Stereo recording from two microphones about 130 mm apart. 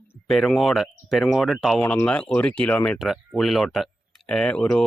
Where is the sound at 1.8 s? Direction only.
10° left (ahead or behind).